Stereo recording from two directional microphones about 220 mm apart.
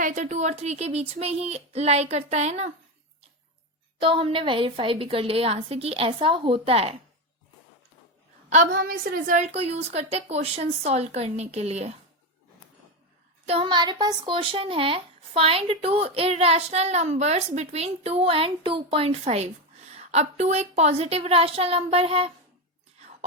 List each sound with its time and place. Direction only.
0.0 s speech: 35° right (ahead or behind)
4.0 s speech: 25° right (ahead or behind)
8.4 s speech: 35° right (ahead or behind)
13.5 s speech: 25° right (ahead or behind)